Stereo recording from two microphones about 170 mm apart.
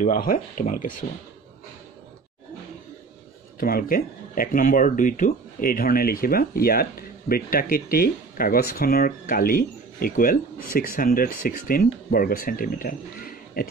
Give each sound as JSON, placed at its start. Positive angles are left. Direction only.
{"t": 0.0, "sound": "speech", "side_deg": 55}
{"t": 3.5, "sound": "speech", "side_deg": 60}